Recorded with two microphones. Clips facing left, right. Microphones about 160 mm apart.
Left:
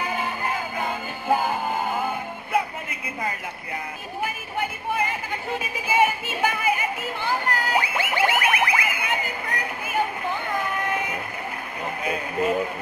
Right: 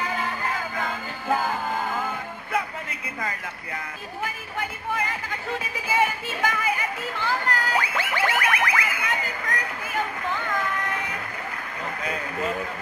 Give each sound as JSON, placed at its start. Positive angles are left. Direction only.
{"t": 0.0, "sound": "music", "side_deg": 15}
{"t": 4.2, "sound": "speech", "side_deg": 15}
{"t": 5.9, "sound": "music", "side_deg": 20}
{"t": 12.0, "sound": "a sound", "side_deg": 15}